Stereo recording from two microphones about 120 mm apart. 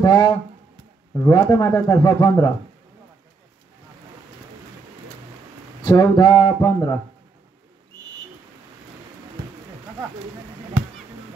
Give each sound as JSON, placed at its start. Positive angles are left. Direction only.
{"t": 0.0, "sound": "speech", "side_deg": 30}
{"t": 1.3, "sound": "speech", "side_deg": 35}
{"t": 5.9, "sound": "speech", "side_deg": 35}